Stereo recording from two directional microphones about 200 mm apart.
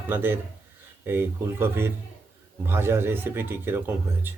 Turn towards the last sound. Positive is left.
turn(degrees=-10)  # may be behind; listen again after turning